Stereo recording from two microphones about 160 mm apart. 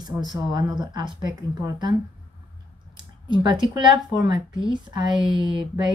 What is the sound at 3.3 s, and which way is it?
Speech, 30° right (ahead or behind).